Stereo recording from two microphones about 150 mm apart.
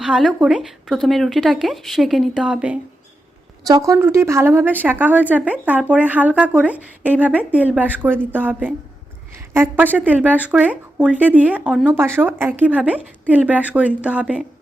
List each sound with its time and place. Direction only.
0.0 s speech: 5° right (ahead or behind)
3.7 s speech: 25° right (ahead or behind)